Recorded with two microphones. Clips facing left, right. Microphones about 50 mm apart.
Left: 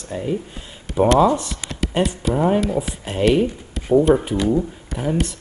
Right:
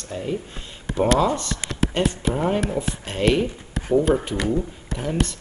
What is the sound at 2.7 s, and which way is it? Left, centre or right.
Speech, centre.